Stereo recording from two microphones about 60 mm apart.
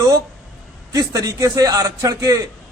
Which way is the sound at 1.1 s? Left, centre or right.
Right.